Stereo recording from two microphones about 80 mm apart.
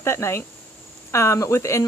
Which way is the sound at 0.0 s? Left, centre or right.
Left.